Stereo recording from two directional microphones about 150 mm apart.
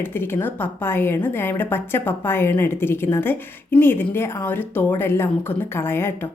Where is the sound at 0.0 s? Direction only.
15° left (ahead or behind).